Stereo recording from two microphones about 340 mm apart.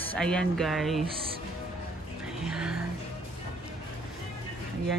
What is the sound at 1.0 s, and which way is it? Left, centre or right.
Speech, centre.